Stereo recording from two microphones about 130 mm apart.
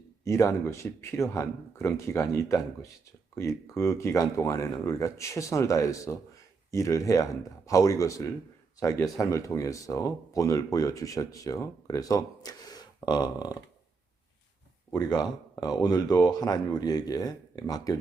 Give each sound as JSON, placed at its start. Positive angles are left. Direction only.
{"t": 0.3, "sound": "speech", "side_deg": 25}
{"t": 14.9, "sound": "speech", "side_deg": 30}